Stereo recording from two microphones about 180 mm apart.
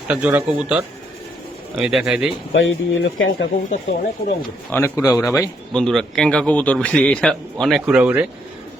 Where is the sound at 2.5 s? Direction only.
90° left.